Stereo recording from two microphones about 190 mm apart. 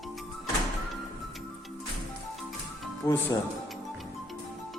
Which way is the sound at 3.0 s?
15° left (ahead or behind).